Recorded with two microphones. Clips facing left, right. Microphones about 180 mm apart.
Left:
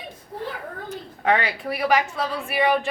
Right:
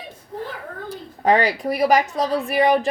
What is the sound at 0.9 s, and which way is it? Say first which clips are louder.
A woman's voice: right 4 dB; 35° right (ahead or behind).